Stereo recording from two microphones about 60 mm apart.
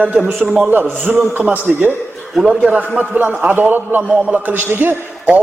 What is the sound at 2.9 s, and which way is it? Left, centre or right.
A man's voice, right.